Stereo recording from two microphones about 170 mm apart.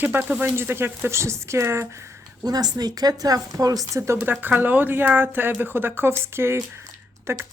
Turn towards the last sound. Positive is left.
turn(degrees=-20)  # may be behind; listen again after turning